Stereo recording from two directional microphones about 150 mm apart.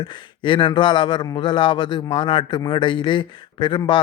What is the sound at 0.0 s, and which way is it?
A man's voice, 35° left (ahead or behind).